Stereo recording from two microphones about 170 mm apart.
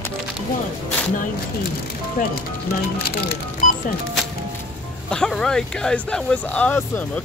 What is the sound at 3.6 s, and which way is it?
Music, 50° left (ahead or behind).